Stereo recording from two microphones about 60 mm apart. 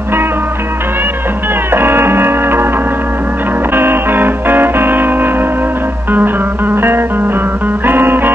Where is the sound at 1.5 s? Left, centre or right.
Right.